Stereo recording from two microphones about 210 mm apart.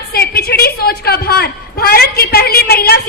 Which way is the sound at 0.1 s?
50° left (ahead or behind).